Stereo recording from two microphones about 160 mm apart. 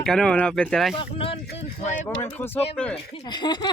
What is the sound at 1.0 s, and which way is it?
Speech, 35° left (ahead or behind).